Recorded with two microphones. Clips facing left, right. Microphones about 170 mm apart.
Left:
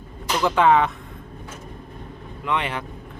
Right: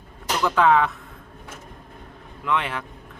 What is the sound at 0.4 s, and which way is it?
Speech, centre (ahead or behind).